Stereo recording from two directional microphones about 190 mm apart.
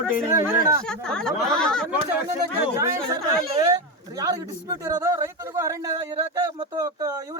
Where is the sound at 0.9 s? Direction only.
5° left (ahead or behind).